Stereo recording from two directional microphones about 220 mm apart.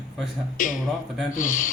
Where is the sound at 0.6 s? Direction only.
40° left (ahead or behind).